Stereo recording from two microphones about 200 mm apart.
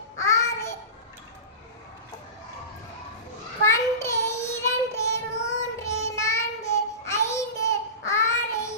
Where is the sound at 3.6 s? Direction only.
15° left (ahead or behind).